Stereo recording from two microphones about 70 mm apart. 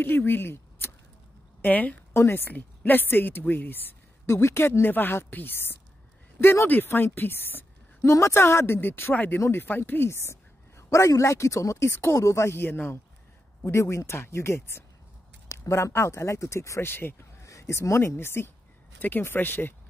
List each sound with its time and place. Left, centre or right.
0.0 s speech: left
1.6 s a woman's voice: left
4.3 s a woman's voice: left
8.1 s a woman's voice: left
12.5 s a woman's voice: left
13.7 s a woman's voice: left
16.8 s a woman's voice: left
17.4 s a woman's voice: left